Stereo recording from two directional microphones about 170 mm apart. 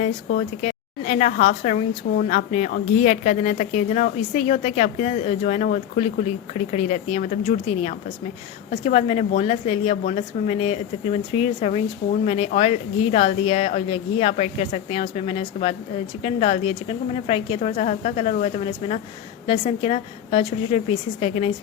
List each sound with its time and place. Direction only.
0.3 s a woman's voice: 45° left (ahead or behind)